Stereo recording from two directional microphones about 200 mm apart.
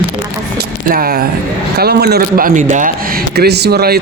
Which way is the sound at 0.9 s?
45° right (ahead or behind).